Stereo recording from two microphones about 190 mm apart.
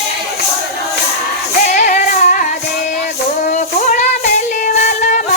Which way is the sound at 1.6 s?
40° left (ahead or behind).